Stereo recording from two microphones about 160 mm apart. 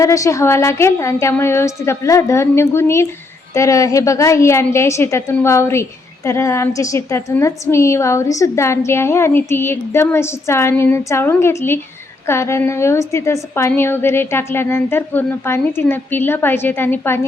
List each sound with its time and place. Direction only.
0.0 s a woman's voice: 20° left (ahead or behind)